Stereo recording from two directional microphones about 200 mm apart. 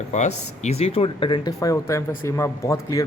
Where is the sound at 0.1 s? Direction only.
35° left (ahead or behind).